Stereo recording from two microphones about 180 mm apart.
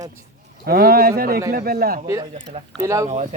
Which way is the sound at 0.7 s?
60° right (ahead or behind).